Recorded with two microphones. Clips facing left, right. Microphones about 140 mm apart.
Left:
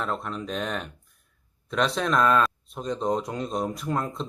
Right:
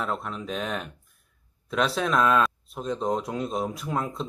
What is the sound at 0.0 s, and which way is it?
Speech, centre (ahead or behind).